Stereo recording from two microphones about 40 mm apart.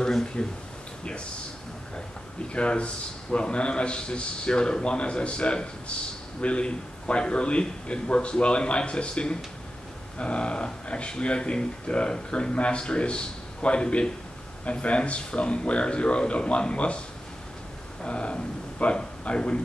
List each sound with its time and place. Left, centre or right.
0.0 s a sound: centre
2.5 s speech: left
18.0 s speech: left